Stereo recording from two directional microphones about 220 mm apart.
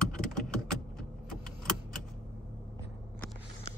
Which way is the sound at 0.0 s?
Centre (ahead or behind).